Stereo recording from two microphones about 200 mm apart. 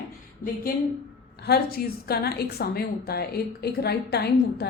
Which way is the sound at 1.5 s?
50° left (ahead or behind).